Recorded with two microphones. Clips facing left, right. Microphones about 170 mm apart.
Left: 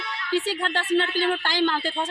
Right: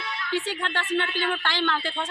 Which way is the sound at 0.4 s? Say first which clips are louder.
Left 3 dB; 35° left (ahead or behind).